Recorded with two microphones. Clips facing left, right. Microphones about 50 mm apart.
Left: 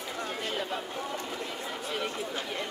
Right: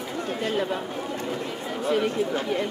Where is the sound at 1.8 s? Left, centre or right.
Right.